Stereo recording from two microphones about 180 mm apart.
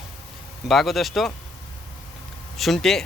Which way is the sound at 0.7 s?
Centre (ahead or behind).